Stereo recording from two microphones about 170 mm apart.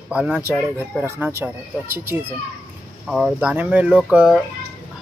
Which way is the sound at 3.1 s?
Centre (ahead or behind).